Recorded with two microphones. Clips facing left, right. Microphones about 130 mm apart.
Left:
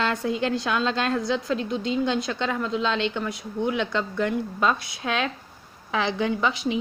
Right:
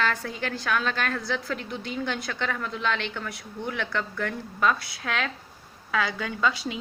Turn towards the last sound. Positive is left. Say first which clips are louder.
# left 3 dB
turn(degrees=20)  # may be behind; listen again after turning